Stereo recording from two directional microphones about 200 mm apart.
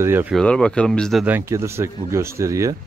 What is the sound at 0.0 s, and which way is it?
Speech, 10° right (ahead or behind).